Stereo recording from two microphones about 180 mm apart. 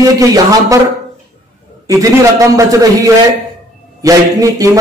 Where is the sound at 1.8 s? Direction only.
20° right (ahead or behind).